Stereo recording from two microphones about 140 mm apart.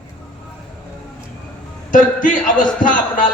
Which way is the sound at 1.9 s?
70° left (ahead or behind).